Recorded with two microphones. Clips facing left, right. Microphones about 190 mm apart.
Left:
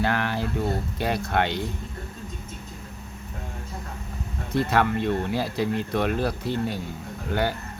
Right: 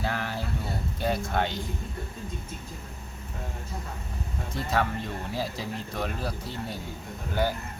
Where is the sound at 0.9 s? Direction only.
70° left (ahead or behind).